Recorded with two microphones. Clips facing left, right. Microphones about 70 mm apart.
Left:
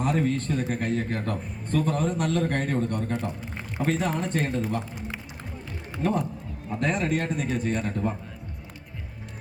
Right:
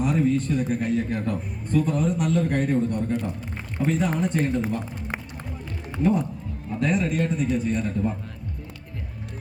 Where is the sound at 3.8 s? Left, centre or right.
Left.